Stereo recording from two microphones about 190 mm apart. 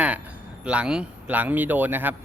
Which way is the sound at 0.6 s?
5° right (ahead or behind).